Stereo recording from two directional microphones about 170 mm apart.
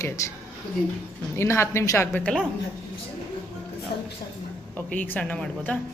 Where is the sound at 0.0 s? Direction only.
20° left (ahead or behind).